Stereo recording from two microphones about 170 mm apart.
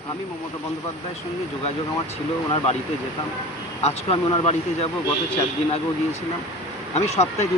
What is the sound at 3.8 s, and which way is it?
Speech, 40° left (ahead or behind).